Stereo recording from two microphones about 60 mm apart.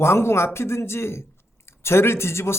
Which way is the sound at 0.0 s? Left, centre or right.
Left.